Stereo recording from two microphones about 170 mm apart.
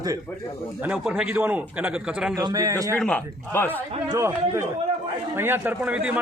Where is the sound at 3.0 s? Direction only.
10° left (ahead or behind).